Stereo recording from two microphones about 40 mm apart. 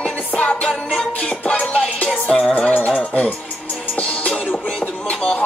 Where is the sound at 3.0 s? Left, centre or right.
Left.